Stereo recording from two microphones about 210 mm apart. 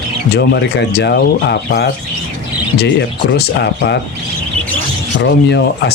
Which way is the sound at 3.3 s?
55° left (ahead or behind).